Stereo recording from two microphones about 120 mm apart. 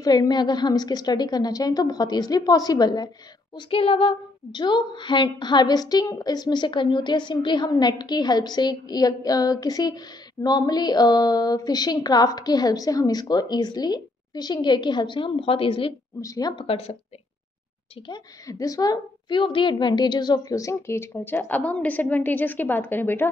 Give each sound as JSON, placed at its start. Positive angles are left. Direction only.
{"t": 0.0, "sound": "a woman's voice", "side_deg": 35}
{"t": 3.5, "sound": "a woman's voice", "side_deg": 50}
{"t": 16.2, "sound": "a woman's voice", "side_deg": 30}
{"t": 16.5, "sound": "a woman's voice", "side_deg": 50}
{"t": 18.0, "sound": "a woman's voice", "side_deg": 35}